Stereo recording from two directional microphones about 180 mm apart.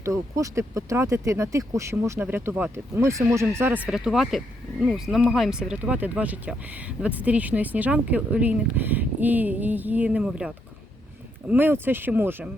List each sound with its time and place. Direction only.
0.0 s speech: 15° right (ahead or behind)